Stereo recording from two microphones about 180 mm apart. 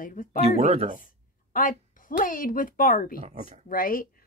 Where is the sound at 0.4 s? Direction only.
35° right (ahead or behind).